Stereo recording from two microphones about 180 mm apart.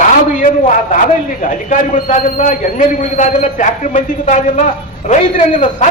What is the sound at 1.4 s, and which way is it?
A man's voice, 45° left (ahead or behind).